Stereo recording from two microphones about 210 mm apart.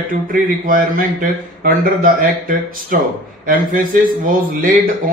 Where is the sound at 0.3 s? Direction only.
40° right (ahead or behind).